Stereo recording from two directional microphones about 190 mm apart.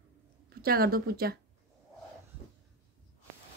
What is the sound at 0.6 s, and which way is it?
Speech, 55° right (ahead or behind).